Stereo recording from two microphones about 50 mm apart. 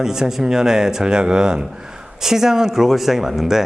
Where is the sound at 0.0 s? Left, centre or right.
Centre.